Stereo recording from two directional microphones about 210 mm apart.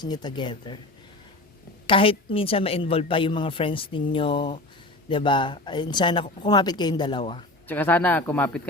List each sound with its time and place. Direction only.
0.0 s a woman's voice: 20° left (ahead or behind)
1.9 s a woman's voice: 25° left (ahead or behind)
7.7 s speech: 10° left (ahead or behind)